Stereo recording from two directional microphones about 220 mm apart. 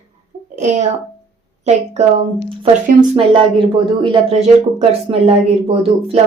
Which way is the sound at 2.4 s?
25° right (ahead or behind).